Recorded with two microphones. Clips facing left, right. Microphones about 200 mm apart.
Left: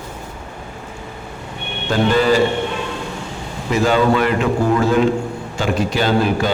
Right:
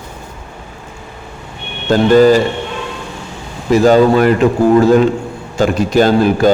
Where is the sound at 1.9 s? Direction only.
40° right (ahead or behind).